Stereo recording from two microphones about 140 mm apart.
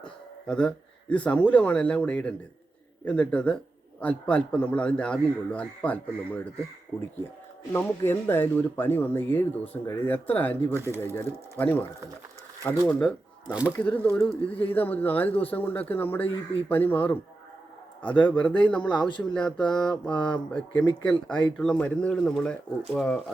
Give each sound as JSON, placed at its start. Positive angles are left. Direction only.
{"t": 0.0, "sound": "a sound", "side_deg": 5}
{"t": 1.1, "sound": "speech", "side_deg": 10}
{"t": 7.7, "sound": "speech", "side_deg": 15}
{"t": 13.5, "sound": "speech", "side_deg": -10}
{"t": 13.7, "sound": "speech", "side_deg": 10}
{"t": 18.9, "sound": "a man's voice", "side_deg": 35}
{"t": 19.3, "sound": "mantra", "side_deg": 5}
{"t": 20.5, "sound": "speech", "side_deg": 10}
{"t": 23.0, "sound": "mantra", "side_deg": 0}